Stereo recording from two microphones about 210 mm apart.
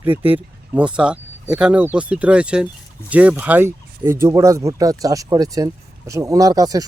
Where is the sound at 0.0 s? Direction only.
10° right (ahead or behind).